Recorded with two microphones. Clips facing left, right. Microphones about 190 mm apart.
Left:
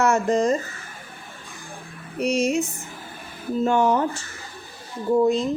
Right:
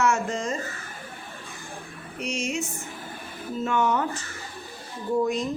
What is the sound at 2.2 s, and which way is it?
Speech, 35° left (ahead or behind).